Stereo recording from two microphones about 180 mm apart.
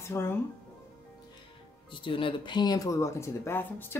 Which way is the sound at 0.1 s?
15° left (ahead or behind).